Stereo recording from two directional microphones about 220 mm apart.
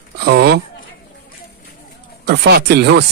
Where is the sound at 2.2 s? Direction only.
50° right (ahead or behind).